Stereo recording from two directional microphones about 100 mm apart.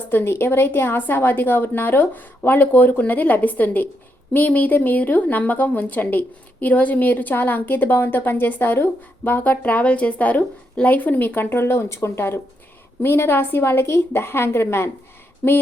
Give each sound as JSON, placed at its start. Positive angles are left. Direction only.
{"t": 0.1, "sound": "a woman's voice", "side_deg": 25}